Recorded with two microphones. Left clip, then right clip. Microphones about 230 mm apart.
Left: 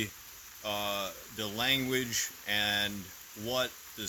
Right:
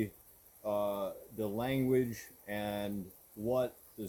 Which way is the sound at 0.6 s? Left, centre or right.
Left.